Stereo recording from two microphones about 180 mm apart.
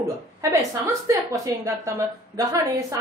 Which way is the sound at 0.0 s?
15° right (ahead or behind).